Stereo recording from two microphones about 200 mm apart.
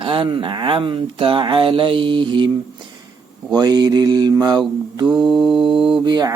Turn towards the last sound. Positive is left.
turn(degrees=-20)  # may be behind; listen again after turning